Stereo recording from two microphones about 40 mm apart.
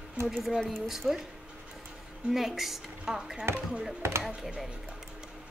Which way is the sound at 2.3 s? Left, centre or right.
Centre.